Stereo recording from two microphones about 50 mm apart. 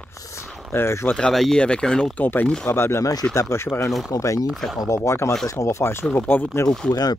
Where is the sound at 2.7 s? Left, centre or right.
Left.